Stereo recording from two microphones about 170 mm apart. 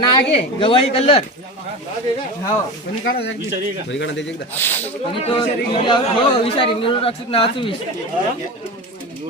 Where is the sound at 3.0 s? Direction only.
60° left (ahead or behind).